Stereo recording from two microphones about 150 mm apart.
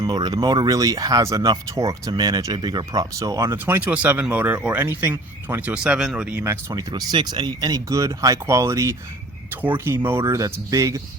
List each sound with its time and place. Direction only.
0.0 s speech: 30° right (ahead or behind); by 6.4 s 5° right (ahead or behind)
6.4 s speech: 20° right (ahead or behind)